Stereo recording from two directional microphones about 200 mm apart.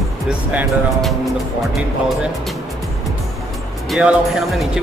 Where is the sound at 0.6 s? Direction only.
Centre (ahead or behind).